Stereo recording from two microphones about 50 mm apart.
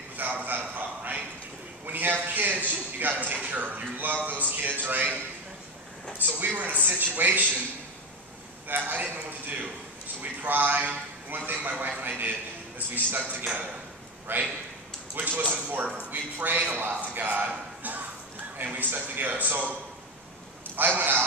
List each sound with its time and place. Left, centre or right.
0.2 s a sound: right
1.9 s a man's voice: right
6.2 s a man's voice: right
8.6 s a man's voice: right
18.6 s a man's voice: right
20.7 s a man's voice: right